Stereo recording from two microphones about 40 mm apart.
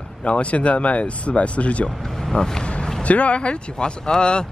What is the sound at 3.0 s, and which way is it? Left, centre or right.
Speech, left.